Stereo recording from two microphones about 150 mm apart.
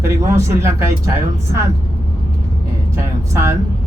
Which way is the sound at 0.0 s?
20° right (ahead or behind).